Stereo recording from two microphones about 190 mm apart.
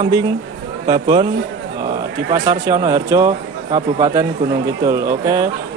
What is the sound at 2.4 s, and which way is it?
Speech, 20° right (ahead or behind).